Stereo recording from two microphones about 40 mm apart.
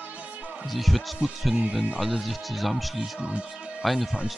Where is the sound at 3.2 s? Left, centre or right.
Right.